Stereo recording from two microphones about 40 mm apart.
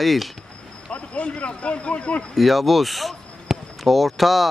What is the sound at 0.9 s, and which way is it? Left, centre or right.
A man's voice, left.